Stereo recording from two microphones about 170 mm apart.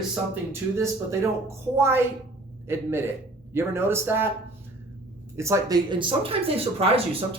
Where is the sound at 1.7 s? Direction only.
15° right (ahead or behind).